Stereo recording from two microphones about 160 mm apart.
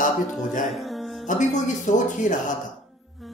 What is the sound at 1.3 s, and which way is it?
Speech, 50° left (ahead or behind).